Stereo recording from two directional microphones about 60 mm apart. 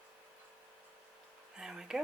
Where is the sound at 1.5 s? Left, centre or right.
Centre.